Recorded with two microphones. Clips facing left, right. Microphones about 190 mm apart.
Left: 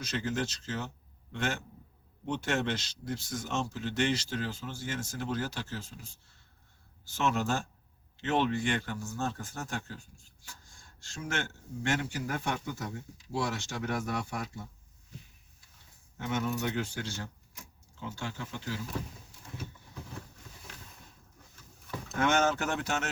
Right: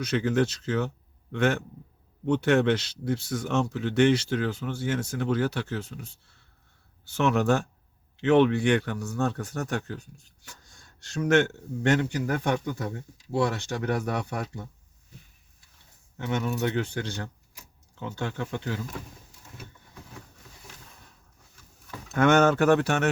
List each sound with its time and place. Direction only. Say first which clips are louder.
0.0 s speech: right 9 dB; 60° right (ahead or behind)
7.2 s speech: right 7 dB; 60° right (ahead or behind)
16.3 s speech: right 5 dB; 60° right (ahead or behind)
22.1 s speech: right 8 dB; 60° right (ahead or behind)